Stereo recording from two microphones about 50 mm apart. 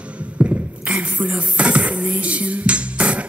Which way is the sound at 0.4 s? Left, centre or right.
Right.